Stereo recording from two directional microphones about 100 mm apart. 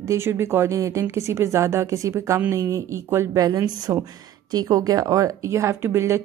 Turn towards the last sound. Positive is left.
turn(degrees=-25)  # may be behind; listen again after turning